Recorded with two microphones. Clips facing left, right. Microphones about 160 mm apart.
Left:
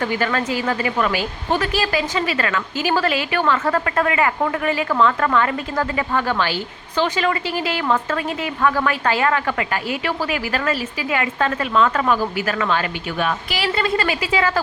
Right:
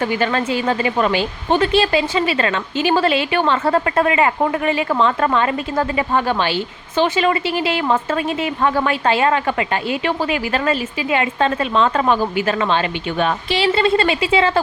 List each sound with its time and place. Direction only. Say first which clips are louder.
0.0 s speech: right 2 dB; 20° right (ahead or behind)